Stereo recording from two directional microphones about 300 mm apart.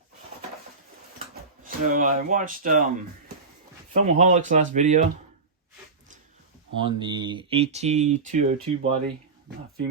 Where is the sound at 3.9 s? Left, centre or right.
Right.